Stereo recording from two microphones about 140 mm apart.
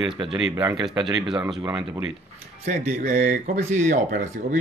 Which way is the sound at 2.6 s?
60° right (ahead or behind).